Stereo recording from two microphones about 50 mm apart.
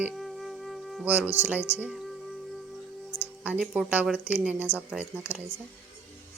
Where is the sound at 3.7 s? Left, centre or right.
Right.